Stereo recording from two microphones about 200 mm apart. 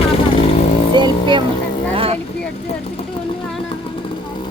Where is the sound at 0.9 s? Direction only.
20° right (ahead or behind).